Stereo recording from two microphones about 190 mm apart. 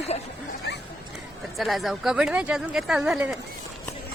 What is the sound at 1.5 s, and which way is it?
Speech, centre (ahead or behind).